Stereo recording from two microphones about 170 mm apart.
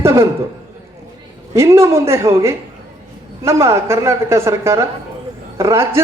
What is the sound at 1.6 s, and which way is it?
A man's voice, 15° right (ahead or behind).